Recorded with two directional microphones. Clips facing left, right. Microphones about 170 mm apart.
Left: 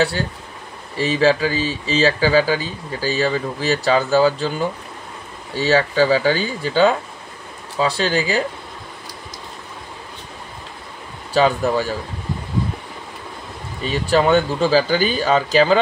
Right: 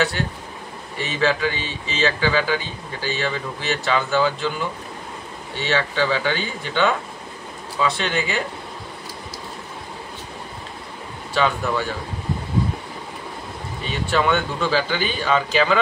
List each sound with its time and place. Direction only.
0.9 s speech: 35° left (ahead or behind)
11.3 s speech: 35° left (ahead or behind)
14.0 s speech: 35° left (ahead or behind)